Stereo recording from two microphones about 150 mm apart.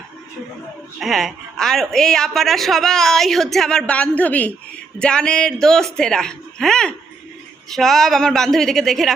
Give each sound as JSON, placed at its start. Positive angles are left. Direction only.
{"t": 0.9, "sound": "a woman's voice", "side_deg": 0}